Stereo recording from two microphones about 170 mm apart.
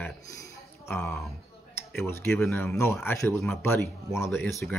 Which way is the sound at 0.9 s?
10° left (ahead or behind).